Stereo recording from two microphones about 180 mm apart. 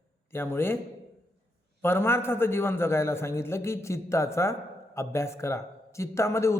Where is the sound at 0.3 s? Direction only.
15° left (ahead or behind).